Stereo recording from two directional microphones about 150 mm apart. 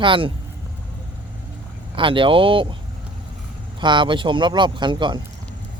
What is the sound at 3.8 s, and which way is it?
Speech, 30° right (ahead or behind).